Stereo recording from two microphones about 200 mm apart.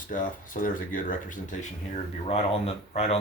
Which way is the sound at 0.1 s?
40° left (ahead or behind).